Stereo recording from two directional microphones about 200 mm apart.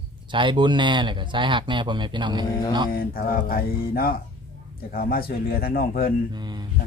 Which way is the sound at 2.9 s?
45° left (ahead or behind).